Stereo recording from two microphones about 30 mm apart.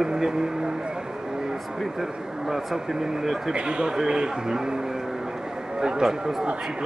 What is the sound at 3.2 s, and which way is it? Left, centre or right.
Speech, centre.